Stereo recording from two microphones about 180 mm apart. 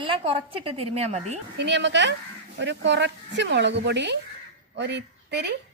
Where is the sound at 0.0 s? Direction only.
30° right (ahead or behind).